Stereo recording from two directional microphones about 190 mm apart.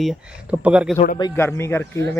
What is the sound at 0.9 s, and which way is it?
Speech, 45° left (ahead or behind).